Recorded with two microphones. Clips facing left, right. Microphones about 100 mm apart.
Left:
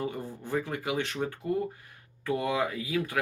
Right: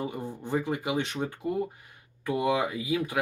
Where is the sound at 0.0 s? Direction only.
20° right (ahead or behind).